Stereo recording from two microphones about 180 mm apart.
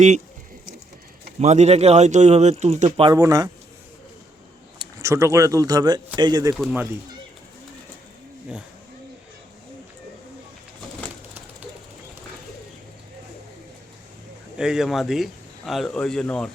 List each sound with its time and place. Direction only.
1.4 s speech: 40° right (ahead or behind)
3.1 s speech: 20° right (ahead or behind)
4.8 s speech: 20° right (ahead or behind)
6.5 s speech: centre (ahead or behind)
14.6 s speech: 5° right (ahead or behind)